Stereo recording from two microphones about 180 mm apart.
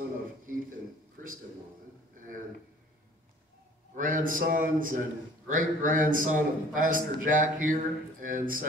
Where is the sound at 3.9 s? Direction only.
50° right (ahead or behind).